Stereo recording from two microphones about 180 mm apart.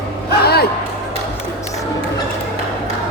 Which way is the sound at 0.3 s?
60° left (ahead or behind).